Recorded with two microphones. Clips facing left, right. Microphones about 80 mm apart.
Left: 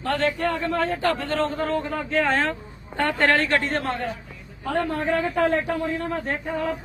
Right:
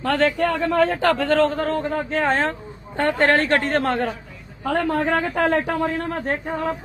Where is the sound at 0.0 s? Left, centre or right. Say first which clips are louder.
Right 4 dB; right.